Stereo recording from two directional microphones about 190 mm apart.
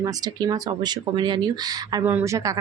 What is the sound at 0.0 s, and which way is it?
Speech, 20° right (ahead or behind).